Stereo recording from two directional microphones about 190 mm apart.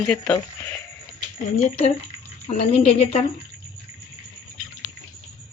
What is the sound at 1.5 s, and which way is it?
A woman's voice, 35° left (ahead or behind).